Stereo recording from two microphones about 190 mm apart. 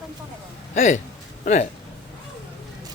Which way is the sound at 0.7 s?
40° left (ahead or behind).